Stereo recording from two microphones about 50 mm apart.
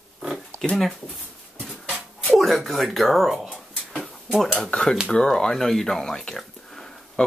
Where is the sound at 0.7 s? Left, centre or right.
Centre.